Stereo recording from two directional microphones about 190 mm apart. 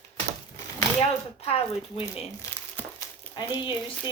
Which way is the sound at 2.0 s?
15° left (ahead or behind).